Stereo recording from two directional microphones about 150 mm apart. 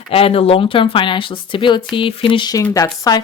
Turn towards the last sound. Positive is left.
turn(degrees=25)  # may be behind; listen again after turning